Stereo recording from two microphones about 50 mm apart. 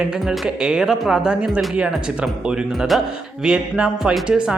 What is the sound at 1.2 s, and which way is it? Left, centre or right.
Speech, centre.